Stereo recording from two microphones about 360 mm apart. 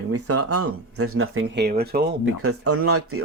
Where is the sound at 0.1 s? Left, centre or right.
Right.